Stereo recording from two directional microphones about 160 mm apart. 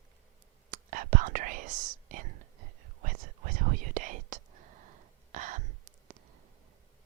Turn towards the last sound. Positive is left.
turn(degrees=-50)  # may be behind; listen again after turning